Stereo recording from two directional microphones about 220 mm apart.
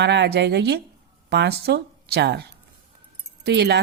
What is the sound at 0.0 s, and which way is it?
A woman's voice, 50° right (ahead or behind).